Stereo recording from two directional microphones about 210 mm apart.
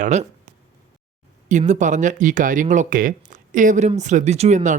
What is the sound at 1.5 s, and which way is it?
Speech, 35° right (ahead or behind).